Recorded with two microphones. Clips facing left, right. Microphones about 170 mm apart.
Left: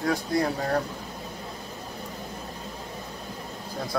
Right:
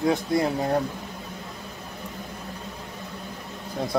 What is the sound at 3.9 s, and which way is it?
Speech, 20° right (ahead or behind).